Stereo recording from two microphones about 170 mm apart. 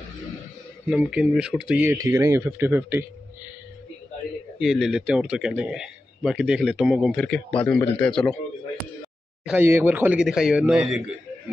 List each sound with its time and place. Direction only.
0.8 s speech: 5° right (ahead or behind)
4.6 s speech: centre (ahead or behind)
9.6 s speech: 10° right (ahead or behind)